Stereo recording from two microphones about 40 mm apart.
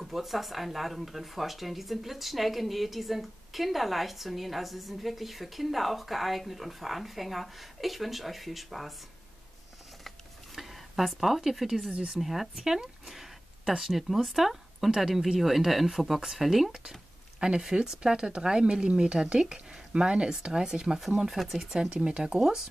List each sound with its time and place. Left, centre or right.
0.0 s speech: centre
10.5 s a sound: centre
12.2 s speech: centre
21.0 s speech: centre
21.9 s speech: right